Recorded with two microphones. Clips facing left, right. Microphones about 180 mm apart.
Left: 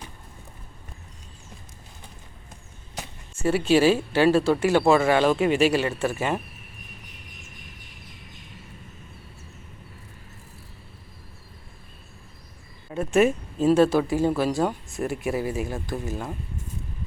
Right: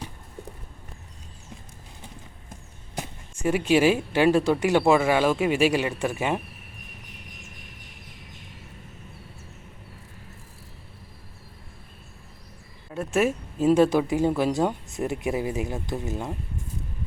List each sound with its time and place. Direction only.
3.4 s speech: 15° right (ahead or behind)
12.9 s a sound: centre (ahead or behind)
13.7 s speech: 15° right (ahead or behind)